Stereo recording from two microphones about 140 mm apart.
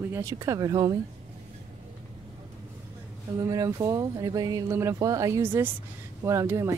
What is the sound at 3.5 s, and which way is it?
Speech, 25° right (ahead or behind).